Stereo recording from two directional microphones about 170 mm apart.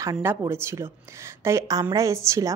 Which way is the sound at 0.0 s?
15° right (ahead or behind).